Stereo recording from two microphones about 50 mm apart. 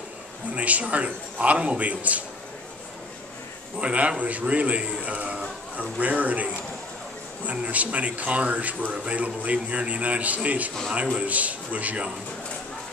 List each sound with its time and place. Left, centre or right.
0.6 s a man's voice: right
3.7 s a man's voice: right